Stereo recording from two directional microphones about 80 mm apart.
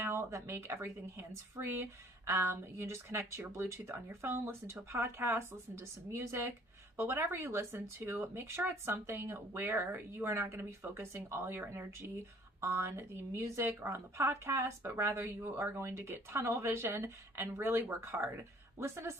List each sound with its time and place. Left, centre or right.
0.0 s speech: right